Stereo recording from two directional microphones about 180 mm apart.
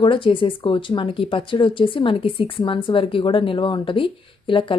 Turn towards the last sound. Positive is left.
turn(degrees=30)  # may be behind; listen again after turning